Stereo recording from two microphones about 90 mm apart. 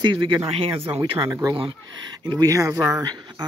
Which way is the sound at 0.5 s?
90° right.